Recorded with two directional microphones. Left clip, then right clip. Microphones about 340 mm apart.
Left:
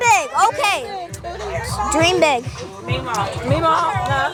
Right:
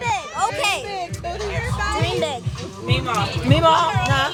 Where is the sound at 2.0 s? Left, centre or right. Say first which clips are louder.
Left 8 dB; left.